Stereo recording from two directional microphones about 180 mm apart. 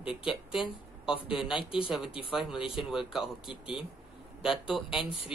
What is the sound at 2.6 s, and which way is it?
Speech, 30° left (ahead or behind).